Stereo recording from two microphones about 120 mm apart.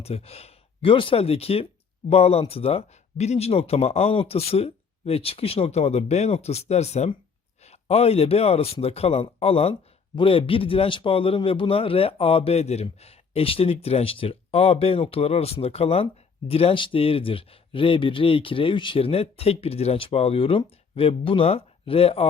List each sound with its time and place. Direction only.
0.0 s a man's voice: 55° left (ahead or behind)